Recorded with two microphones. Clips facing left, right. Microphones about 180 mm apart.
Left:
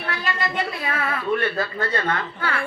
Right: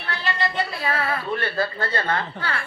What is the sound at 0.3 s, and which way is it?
A woman's voice, 30° right (ahead or behind).